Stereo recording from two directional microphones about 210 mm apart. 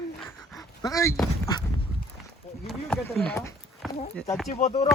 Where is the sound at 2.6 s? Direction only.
5° left (ahead or behind).